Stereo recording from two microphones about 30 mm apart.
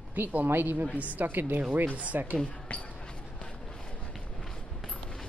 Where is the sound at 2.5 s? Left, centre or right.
Left.